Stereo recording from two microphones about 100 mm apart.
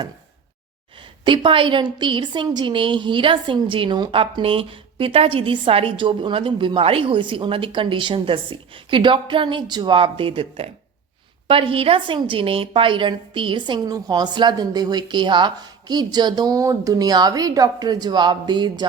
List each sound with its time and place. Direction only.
1.2 s a woman's voice: 55° right (ahead or behind)
4.1 s a woman's voice: 65° right (ahead or behind)